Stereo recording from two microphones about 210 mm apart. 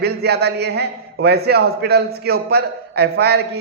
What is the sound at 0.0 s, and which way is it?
A man's voice, 50° right (ahead or behind).